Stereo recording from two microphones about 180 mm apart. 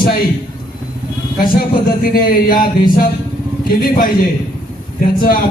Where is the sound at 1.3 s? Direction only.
55° left (ahead or behind).